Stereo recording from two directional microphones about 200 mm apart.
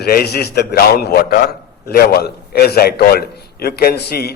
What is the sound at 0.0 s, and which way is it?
A man's voice, 50° left (ahead or behind).